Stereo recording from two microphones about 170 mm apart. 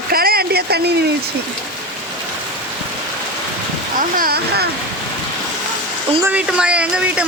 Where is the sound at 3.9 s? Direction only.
55° right (ahead or behind).